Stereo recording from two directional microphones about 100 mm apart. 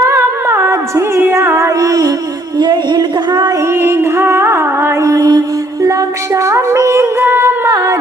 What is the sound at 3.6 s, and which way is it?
Music, 25° right (ahead or behind).